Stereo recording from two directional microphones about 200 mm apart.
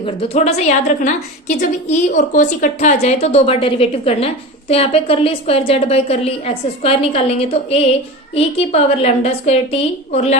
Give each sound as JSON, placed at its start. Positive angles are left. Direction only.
{"t": 0.0, "sound": "a woman's voice", "side_deg": 30}